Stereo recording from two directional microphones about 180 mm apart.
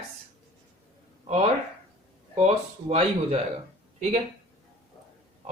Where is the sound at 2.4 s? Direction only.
35° right (ahead or behind).